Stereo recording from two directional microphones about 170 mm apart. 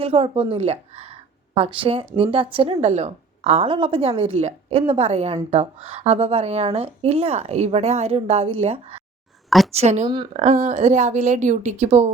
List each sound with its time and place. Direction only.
0.0 s a woman's voice: 35° right (ahead or behind)